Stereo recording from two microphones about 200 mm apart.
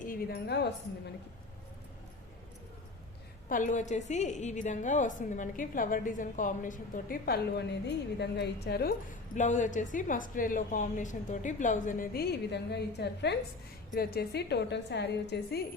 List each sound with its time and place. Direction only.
0.1 s speech: 55° left (ahead or behind)
3.5 s a woman's voice: 40° left (ahead or behind); by 15.6 s 55° left (ahead or behind)